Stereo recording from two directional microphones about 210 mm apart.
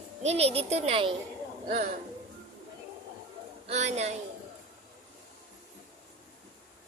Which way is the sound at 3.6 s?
30° right (ahead or behind).